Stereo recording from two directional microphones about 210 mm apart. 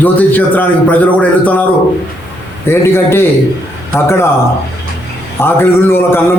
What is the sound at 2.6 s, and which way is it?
A man's voice, 10° left (ahead or behind).